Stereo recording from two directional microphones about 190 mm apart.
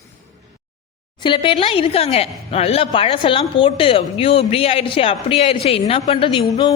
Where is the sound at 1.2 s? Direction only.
25° left (ahead or behind).